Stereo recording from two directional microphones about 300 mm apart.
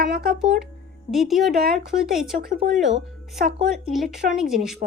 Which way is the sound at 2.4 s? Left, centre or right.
Right.